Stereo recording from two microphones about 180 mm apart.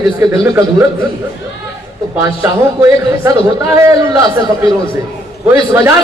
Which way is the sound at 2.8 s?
15° right (ahead or behind).